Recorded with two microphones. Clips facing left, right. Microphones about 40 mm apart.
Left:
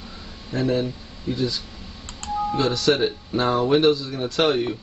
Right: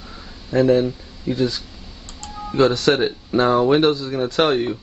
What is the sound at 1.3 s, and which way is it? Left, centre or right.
Speech, right.